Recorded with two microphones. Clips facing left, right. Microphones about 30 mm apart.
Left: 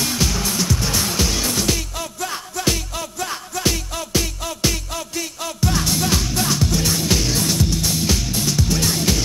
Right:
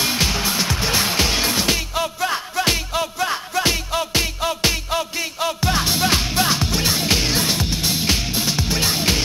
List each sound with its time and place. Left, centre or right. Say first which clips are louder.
0.0 s music: right 2 dB; right